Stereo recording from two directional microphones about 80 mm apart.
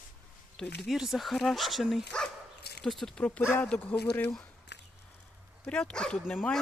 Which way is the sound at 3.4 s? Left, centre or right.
Left.